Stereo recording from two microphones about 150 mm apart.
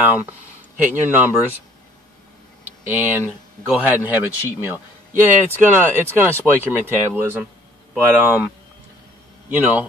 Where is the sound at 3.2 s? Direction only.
10° right (ahead or behind).